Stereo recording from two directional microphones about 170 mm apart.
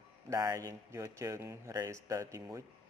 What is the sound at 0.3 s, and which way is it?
Speech, 20° right (ahead or behind).